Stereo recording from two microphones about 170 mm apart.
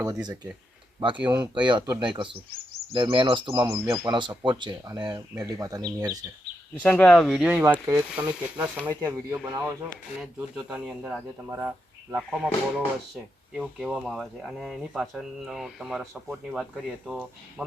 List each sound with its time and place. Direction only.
0.0 s speech: 25° right (ahead or behind)
1.5 s speech: 25° right (ahead or behind)
6.8 s speech: 10° left (ahead or behind)